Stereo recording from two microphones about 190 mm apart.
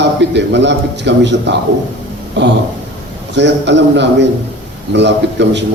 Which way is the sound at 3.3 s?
65° right (ahead or behind).